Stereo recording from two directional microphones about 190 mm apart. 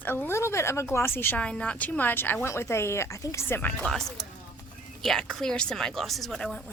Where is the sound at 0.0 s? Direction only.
10° left (ahead or behind).